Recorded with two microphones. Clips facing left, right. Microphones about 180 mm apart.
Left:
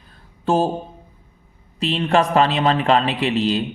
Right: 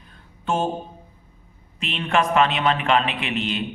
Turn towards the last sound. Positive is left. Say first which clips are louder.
# left 7 dB
turn(degrees=35)  # may be behind; listen again after turning